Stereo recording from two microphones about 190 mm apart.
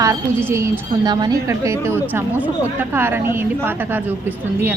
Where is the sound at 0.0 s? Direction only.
15° right (ahead or behind).